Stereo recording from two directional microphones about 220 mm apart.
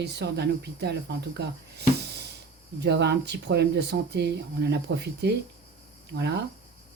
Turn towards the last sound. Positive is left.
turn(degrees=-50)  # may be behind; listen again after turning